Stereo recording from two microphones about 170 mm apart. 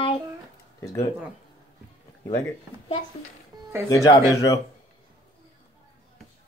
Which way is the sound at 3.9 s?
20° left (ahead or behind).